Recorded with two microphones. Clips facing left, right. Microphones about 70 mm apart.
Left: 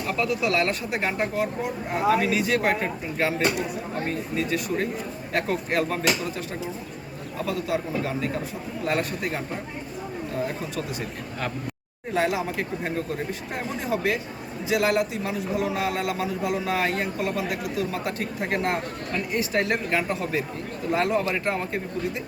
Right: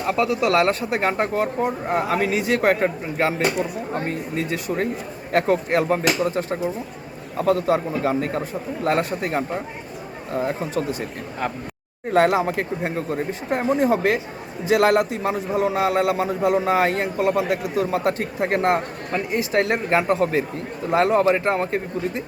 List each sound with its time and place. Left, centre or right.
0.4 s a man's voice: right
8.9 s a man's voice: right
12.1 s a man's voice: right